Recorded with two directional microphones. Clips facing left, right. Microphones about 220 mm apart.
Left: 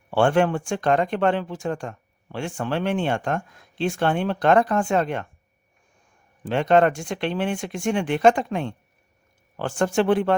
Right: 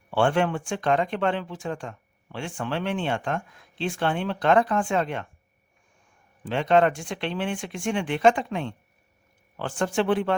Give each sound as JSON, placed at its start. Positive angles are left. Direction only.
{"t": 0.1, "sound": "speech", "side_deg": 45}
{"t": 6.4, "sound": "speech", "side_deg": 45}